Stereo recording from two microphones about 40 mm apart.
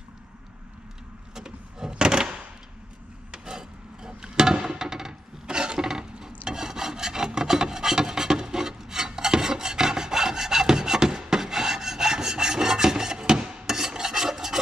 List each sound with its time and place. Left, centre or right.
1.3 s door: centre
3.3 s a sound: centre
13.7 s filing: centre